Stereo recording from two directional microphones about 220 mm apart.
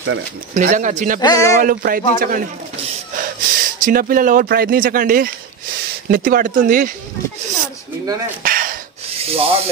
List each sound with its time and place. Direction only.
0.6 s speech: 35° right (ahead or behind)
1.2 s speech: 15° left (ahead or behind)
1.6 s speech: 40° right (ahead or behind)
8.4 s a sound: 40° right (ahead or behind)
9.2 s speech: 25° right (ahead or behind)